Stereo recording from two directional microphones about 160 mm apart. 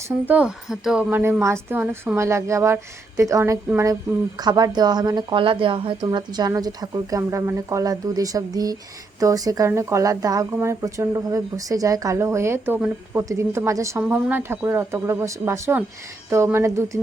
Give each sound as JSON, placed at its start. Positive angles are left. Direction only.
{"t": 0.3, "sound": "speech", "side_deg": -5}
{"t": 1.2, "sound": "speech", "side_deg": -15}